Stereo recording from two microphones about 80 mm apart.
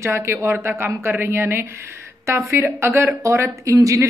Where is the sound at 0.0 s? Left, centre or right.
Right.